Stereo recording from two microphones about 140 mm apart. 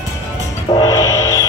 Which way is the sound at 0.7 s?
30° left (ahead or behind).